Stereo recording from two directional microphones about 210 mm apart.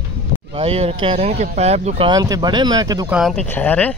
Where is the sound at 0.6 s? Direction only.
25° right (ahead or behind).